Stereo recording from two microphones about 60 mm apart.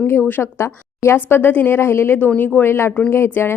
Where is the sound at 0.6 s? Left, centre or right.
Left.